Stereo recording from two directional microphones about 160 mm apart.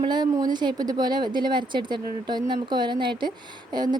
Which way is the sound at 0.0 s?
25° right (ahead or behind).